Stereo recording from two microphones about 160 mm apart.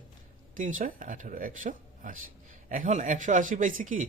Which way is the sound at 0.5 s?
55° right (ahead or behind).